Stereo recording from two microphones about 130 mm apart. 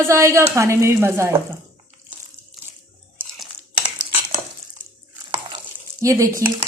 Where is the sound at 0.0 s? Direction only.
20° right (ahead or behind).